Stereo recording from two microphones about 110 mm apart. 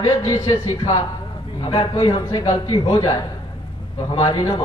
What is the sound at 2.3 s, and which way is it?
A man's voice, 30° left (ahead or behind).